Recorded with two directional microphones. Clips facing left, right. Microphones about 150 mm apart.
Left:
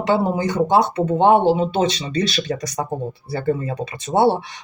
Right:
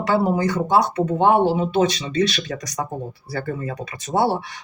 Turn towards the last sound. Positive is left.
turn(degrees=25)  # may be behind; listen again after turning